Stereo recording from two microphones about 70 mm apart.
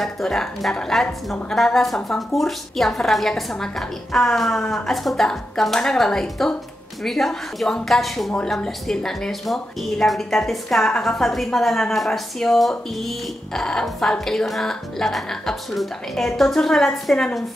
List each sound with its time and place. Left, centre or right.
0.0 s a woman's voice: centre